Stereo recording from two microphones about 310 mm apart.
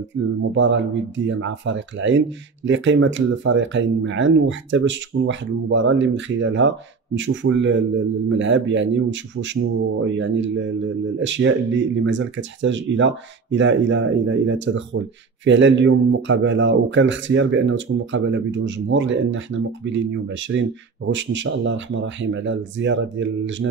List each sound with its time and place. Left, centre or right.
0.6 s speech: right